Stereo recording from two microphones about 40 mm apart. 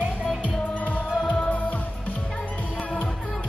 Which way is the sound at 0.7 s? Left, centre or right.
Left.